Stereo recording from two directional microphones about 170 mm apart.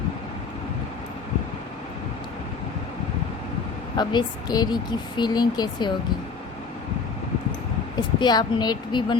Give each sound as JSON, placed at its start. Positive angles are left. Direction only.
{"t": 3.9, "sound": "speech", "side_deg": 25}
{"t": 8.2, "sound": "speech", "side_deg": 25}